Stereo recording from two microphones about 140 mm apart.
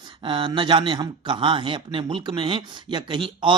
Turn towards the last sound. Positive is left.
turn(degrees=-35)  # may be behind; listen again after turning